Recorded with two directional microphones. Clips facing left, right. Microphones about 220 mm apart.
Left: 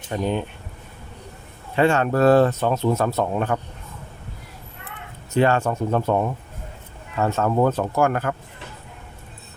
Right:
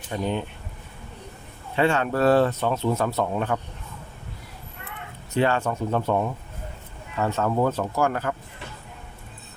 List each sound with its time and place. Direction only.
0.1 s speech: 45° left (ahead or behind)
1.7 s speech: 45° left (ahead or behind)
5.4 s speech: 50° left (ahead or behind)
7.2 s speech: 50° left (ahead or behind)